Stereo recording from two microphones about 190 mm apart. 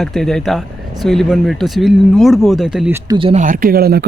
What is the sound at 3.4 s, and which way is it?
Speech, 45° right (ahead or behind).